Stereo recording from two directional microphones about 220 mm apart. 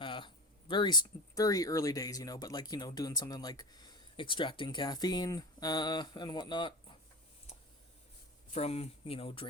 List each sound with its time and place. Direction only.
0.0 s speech: 20° left (ahead or behind)
8.5 s speech: 30° left (ahead or behind)